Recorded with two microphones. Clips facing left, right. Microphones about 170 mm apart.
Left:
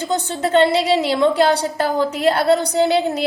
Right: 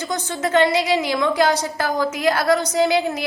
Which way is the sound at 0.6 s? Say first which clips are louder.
Left 2 dB; 30° left (ahead or behind).